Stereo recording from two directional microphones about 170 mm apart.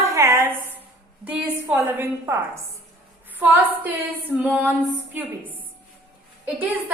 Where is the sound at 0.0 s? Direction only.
15° right (ahead or behind).